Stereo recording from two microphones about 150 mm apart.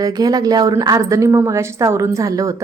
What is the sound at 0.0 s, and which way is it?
A woman's voice, 25° right (ahead or behind).